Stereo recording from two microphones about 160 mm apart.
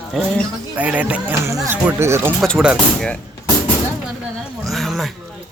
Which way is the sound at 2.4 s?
Centre (ahead or behind).